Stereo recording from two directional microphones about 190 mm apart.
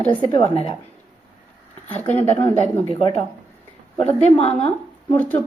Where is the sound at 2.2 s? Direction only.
10° left (ahead or behind).